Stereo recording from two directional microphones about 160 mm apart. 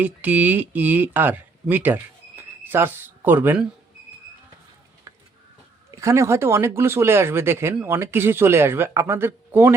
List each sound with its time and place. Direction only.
0.0 s speech: 10° right (ahead or behind)
5.9 s speech: 20° right (ahead or behind)